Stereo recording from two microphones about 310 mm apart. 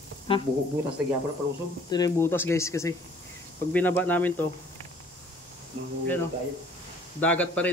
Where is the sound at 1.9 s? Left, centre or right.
Centre.